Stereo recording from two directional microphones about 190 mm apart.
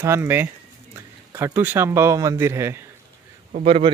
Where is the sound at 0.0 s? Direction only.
10° right (ahead or behind).